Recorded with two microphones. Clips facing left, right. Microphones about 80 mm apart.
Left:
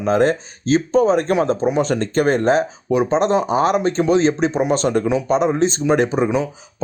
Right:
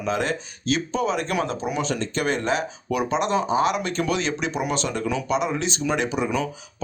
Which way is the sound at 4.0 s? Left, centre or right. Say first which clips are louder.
Left 9 dB; left.